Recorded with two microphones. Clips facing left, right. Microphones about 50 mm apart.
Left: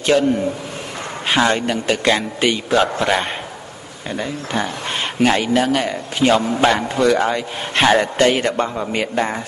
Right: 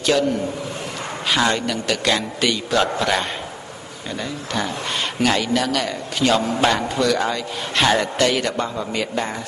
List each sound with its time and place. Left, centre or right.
0.0 s a man's voice: left; by 6.8 s centre
7.0 s a man's voice: left